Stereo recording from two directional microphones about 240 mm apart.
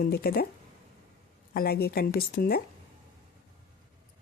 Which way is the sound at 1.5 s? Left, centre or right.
Left.